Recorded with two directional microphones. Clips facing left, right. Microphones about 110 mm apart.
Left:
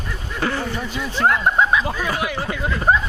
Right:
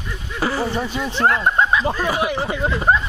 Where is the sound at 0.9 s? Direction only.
20° right (ahead or behind).